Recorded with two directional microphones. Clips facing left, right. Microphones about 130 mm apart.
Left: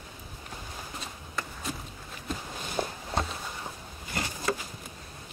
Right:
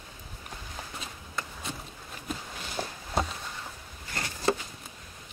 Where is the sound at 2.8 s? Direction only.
20° left (ahead or behind).